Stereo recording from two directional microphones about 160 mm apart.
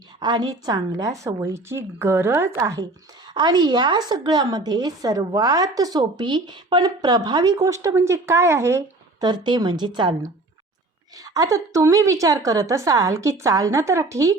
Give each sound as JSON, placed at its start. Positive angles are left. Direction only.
{"t": 0.2, "sound": "a woman's voice", "side_deg": -25}